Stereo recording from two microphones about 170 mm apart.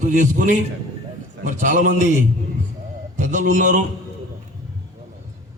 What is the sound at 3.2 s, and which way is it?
Speech, 45° right (ahead or behind).